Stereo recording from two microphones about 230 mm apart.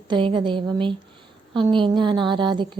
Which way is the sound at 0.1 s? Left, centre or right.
Right.